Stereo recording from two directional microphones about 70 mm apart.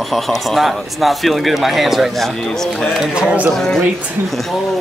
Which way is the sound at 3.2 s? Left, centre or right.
Centre.